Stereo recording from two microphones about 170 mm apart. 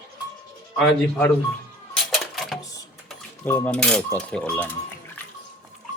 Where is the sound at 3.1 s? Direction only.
10° left (ahead or behind).